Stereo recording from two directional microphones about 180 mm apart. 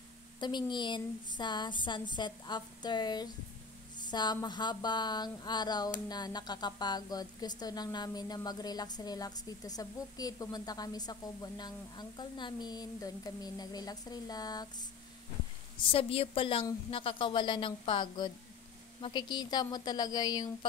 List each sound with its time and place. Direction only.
0.4 s a woman's voice: 25° left (ahead or behind)
15.8 s a woman's voice: 30° left (ahead or behind)